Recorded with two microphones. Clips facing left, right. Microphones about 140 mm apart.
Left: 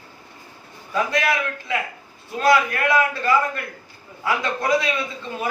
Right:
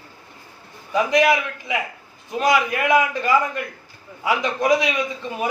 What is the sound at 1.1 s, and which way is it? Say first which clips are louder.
A man's voice: right 5 dB; 15° right (ahead or behind).